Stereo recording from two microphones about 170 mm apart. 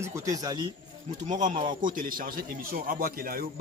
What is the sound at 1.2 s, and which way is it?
A man's voice, 45° right (ahead or behind).